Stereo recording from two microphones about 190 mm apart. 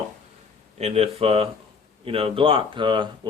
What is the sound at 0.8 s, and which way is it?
Speech, 30° right (ahead or behind).